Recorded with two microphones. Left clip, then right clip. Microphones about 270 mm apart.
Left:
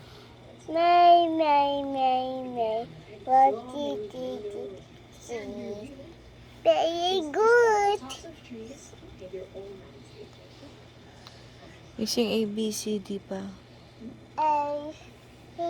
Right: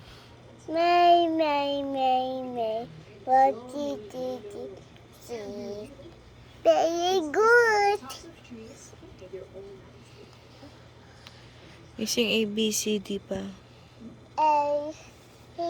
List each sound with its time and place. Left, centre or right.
0.7 s a sound: centre
3.2 s child singing: centre
6.6 s a woman's voice: right
7.4 s child singing: right
11.9 s a woman's voice: centre